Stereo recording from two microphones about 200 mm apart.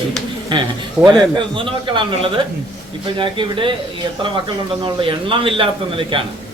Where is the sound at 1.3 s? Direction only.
25° right (ahead or behind).